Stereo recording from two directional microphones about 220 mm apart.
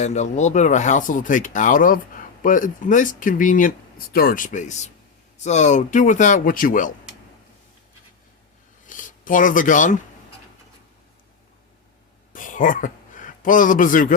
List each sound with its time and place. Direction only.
0.0 s speech: 30° left (ahead or behind)
8.9 s speech: 35° left (ahead or behind)
12.3 s speech: 35° left (ahead or behind)